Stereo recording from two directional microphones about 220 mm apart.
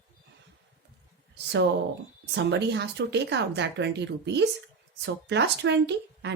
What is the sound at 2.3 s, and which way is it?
Speech, 50° right (ahead or behind).